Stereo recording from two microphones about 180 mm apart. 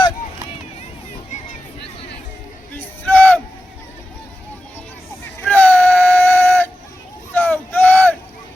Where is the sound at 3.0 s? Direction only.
10° left (ahead or behind).